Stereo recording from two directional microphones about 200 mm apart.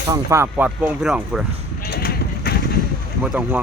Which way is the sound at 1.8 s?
50° left (ahead or behind).